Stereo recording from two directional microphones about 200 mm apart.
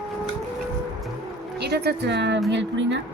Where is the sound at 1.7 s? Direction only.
55° right (ahead or behind).